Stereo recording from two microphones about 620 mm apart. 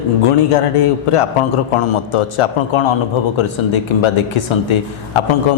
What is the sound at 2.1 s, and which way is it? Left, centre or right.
Speech, left.